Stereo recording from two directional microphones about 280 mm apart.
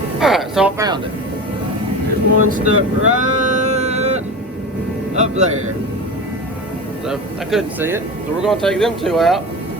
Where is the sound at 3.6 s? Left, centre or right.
Right.